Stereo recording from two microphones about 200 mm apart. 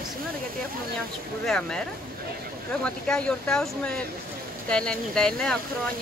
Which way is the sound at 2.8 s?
5° left (ahead or behind).